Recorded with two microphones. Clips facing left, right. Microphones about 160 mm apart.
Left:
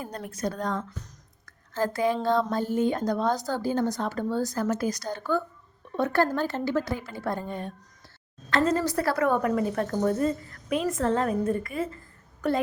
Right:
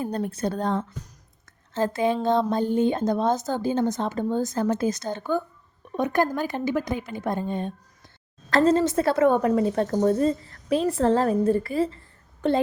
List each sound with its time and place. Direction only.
0.0 s speech: 30° right (ahead or behind)
1.5 s a sound: 20° right (ahead or behind)
2.2 s speech: 20° right (ahead or behind)
8.4 s speech: 35° right (ahead or behind)